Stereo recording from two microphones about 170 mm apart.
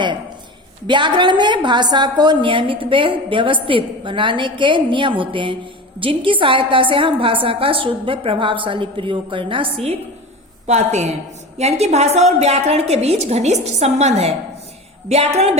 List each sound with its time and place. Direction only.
0.9 s a woman's voice: 25° right (ahead or behind)